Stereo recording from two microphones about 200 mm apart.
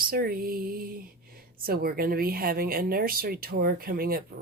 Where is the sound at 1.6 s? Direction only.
50° right (ahead or behind).